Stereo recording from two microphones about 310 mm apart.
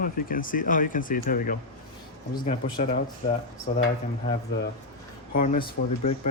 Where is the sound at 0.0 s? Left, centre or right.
Left.